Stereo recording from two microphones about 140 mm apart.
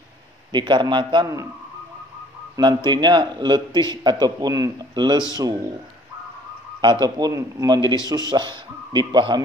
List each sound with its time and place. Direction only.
0.5 s a man's voice: 35° right (ahead or behind)
2.5 s a man's voice: 30° right (ahead or behind)
6.8 s a man's voice: 30° right (ahead or behind)